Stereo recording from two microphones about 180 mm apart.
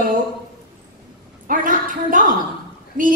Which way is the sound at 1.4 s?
50° right (ahead or behind).